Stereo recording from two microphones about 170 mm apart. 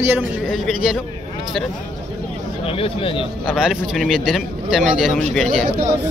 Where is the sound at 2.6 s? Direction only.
35° left (ahead or behind).